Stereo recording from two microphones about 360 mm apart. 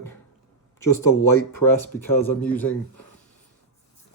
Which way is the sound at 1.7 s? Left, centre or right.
Centre.